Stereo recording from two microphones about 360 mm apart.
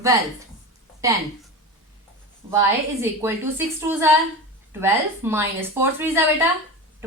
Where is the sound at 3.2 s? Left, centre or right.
Centre.